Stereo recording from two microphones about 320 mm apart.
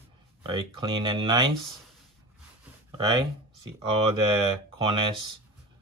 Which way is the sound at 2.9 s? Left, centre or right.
Centre.